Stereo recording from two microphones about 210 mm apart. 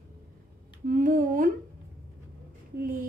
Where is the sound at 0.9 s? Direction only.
40° right (ahead or behind).